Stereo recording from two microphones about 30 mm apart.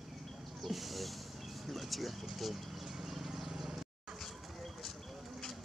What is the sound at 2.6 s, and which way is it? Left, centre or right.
Horse, centre.